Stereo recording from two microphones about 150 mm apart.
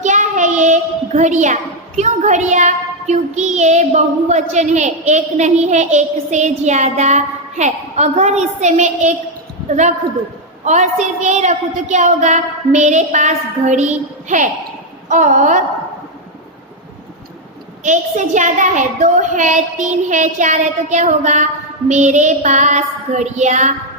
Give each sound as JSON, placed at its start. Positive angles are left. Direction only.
{"t": 0.0, "sound": "child singing", "side_deg": -55}
{"t": 9.6, "sound": "a woman's voice", "side_deg": -55}
{"t": 10.6, "sound": "child singing", "side_deg": -50}
{"t": 15.1, "sound": "a woman's voice", "side_deg": -55}
{"t": 17.8, "sound": "a woman's voice", "side_deg": -55}
{"t": 20.1, "sound": "child singing", "side_deg": -55}